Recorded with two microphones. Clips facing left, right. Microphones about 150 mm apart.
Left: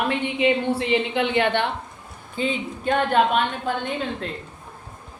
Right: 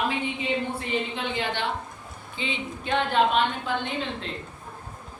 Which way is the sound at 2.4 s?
45° left (ahead or behind).